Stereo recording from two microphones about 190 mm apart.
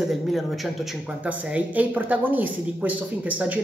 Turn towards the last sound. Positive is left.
turn(degrees=-10)  # may be behind; listen again after turning